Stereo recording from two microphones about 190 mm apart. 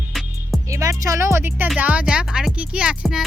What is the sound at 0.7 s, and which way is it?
Music, 15° right (ahead or behind).